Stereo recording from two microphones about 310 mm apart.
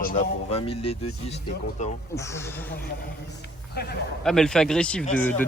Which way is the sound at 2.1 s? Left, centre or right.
Centre.